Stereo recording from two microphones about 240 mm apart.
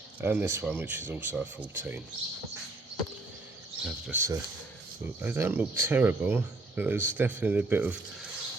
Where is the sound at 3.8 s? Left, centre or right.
Centre.